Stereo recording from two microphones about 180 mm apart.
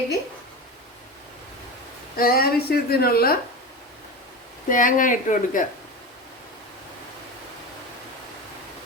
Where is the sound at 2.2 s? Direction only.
55° left (ahead or behind).